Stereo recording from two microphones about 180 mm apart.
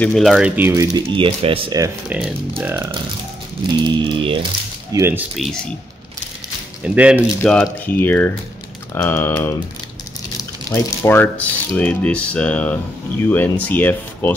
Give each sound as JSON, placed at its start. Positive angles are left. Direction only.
{"t": 0.0, "sound": "speech", "side_deg": 0}
{"t": 3.7, "sound": "a sound", "side_deg": -25}
{"t": 4.9, "sound": "speech", "side_deg": -15}
{"t": 5.3, "sound": "speech", "side_deg": 0}
{"t": 6.8, "sound": "speech", "side_deg": -5}
{"t": 7.2, "sound": "speech", "side_deg": 5}
{"t": 10.7, "sound": "speech", "side_deg": 15}